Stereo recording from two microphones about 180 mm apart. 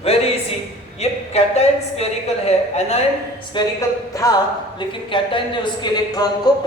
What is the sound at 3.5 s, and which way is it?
A man's voice, 25° left (ahead or behind).